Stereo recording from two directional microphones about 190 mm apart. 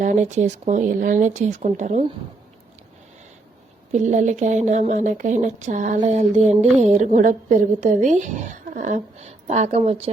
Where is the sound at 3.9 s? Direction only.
40° right (ahead or behind).